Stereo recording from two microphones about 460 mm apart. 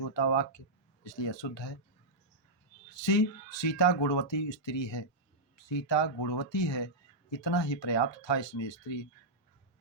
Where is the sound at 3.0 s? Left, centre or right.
Left.